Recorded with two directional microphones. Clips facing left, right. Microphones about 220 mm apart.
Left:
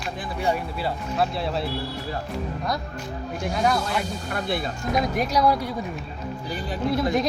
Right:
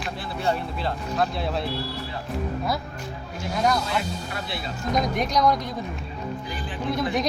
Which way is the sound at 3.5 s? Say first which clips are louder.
Even; centre (ahead or behind).